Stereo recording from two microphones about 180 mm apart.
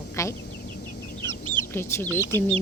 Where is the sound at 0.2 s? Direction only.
15° left (ahead or behind).